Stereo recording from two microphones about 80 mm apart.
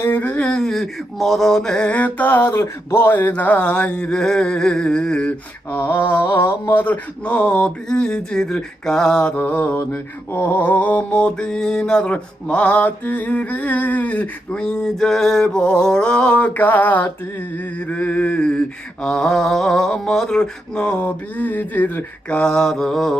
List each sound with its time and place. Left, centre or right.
0.0 s mantra: left
5.7 s mantra: left; by 23.1 s centre